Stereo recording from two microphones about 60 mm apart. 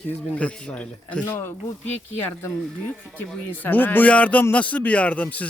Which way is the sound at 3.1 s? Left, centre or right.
Left.